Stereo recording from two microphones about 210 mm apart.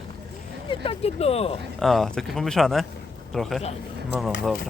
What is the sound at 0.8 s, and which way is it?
Speech, 25° left (ahead or behind).